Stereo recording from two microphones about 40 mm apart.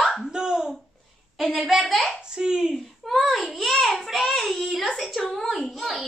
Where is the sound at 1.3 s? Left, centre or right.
Centre.